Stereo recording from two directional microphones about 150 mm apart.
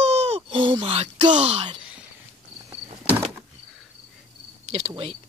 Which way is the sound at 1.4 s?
45° right (ahead or behind).